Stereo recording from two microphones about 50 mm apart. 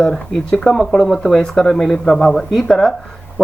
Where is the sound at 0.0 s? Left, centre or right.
Centre.